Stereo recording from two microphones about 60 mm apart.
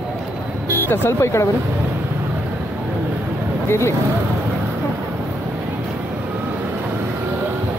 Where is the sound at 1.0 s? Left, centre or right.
Left.